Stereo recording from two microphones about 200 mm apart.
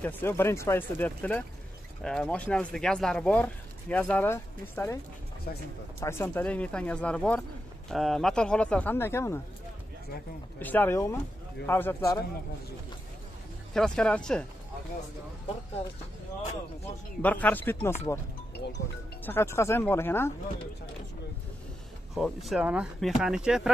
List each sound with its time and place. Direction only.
0.0 s speech: 10° left (ahead or behind)
5.9 s speech: 10° left (ahead or behind)
10.6 s speech: 10° left (ahead or behind)
13.7 s speech: 5° left (ahead or behind)
17.2 s speech: 10° left (ahead or behind)
18.6 s music: 60° left (ahead or behind)
19.2 s speech: 10° left (ahead or behind)
22.1 s speech: centre (ahead or behind)